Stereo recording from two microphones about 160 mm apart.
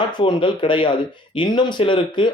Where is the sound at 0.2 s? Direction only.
30° left (ahead or behind).